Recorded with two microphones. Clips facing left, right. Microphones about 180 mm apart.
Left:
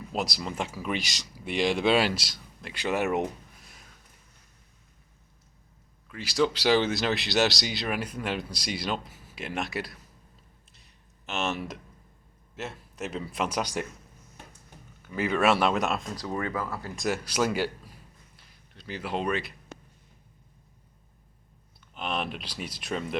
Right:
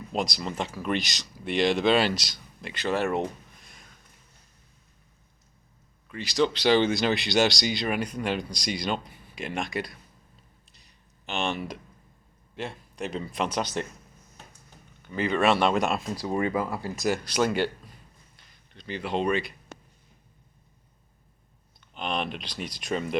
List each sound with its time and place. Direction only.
0.1 s speech: 5° left (ahead or behind)
2.8 s speech: 15° left (ahead or behind)
3.6 s a sound: 5° left (ahead or behind)
6.1 s speech: 5° left (ahead or behind)
10.7 s a sound: centre (ahead or behind)
12.5 s speech: 5° left (ahead or behind)
15.0 s speech: 5° left (ahead or behind)
16.2 s speech: 15° right (ahead or behind)
16.9 s speech: centre (ahead or behind)
18.3 s a sound: 5° left (ahead or behind)
21.9 s speech: 5° left (ahead or behind)